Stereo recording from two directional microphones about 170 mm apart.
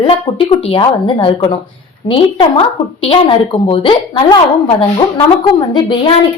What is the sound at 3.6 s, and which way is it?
A woman's voice, 30° left (ahead or behind).